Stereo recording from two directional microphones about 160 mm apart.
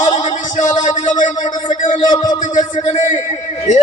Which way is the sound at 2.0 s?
25° left (ahead or behind).